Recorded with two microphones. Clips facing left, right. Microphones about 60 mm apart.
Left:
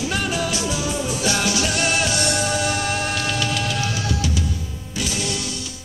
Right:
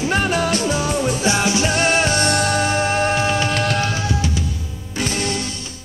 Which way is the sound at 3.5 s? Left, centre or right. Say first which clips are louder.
Right 4 dB; right.